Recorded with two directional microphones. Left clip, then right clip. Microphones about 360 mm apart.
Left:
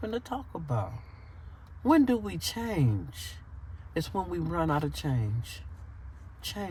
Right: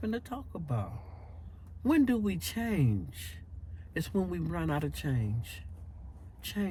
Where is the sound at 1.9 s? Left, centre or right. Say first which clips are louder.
Left 4 dB; centre.